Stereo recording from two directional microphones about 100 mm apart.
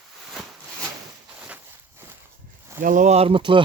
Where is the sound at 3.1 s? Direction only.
75° right (ahead or behind); by 3.6 s 55° right (ahead or behind).